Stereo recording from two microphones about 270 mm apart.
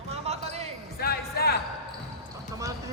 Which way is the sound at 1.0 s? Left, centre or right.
Left.